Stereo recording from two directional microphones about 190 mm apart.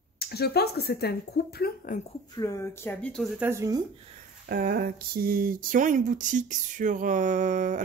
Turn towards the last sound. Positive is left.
turn(degrees=-40)  # may be behind; listen again after turning